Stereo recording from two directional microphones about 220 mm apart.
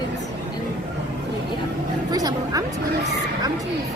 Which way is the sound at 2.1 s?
15° right (ahead or behind).